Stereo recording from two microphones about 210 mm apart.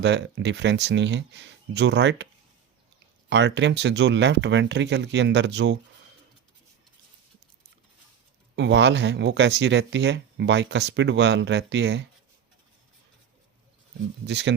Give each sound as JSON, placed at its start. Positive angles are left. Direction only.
{"t": 0.0, "sound": "speech", "side_deg": -55}
{"t": 3.2, "sound": "speech", "side_deg": -55}
{"t": 8.5, "sound": "speech", "side_deg": -55}
{"t": 14.3, "sound": "speech", "side_deg": -55}